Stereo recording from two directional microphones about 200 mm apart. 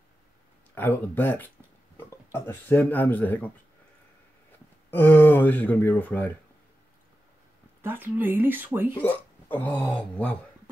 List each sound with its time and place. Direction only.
0.7 s speech: 10° left (ahead or behind)
4.9 s speech: 10° left (ahead or behind)
7.8 s speech: 10° right (ahead or behind)
9.0 s speech: 10° left (ahead or behind)